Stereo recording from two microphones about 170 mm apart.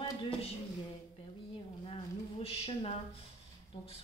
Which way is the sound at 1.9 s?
35° left (ahead or behind).